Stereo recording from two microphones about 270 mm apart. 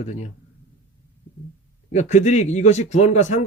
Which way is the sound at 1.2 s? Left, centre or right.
Left.